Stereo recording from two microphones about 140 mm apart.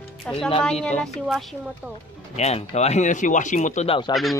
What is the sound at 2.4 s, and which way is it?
Speech, 50° left (ahead or behind).